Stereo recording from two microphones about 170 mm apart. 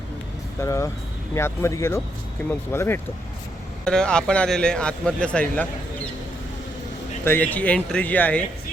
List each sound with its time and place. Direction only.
0.6 s speech: 15° left (ahead or behind)
7.3 s speech: 10° left (ahead or behind)